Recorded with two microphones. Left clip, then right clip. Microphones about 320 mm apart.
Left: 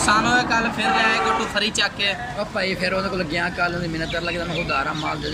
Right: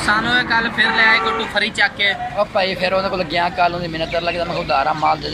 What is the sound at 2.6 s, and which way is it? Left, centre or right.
A man's voice, centre.